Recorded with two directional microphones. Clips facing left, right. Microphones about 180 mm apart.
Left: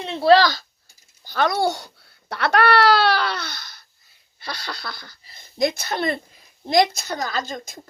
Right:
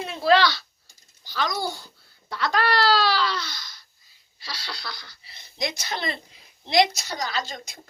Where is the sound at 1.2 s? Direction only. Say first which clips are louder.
Left 7 dB; 55° left (ahead or behind).